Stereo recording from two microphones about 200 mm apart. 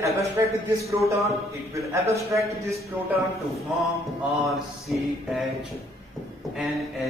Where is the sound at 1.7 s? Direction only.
15° right (ahead or behind).